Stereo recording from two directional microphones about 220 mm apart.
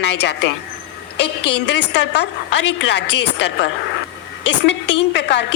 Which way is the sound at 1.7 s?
50° left (ahead or behind).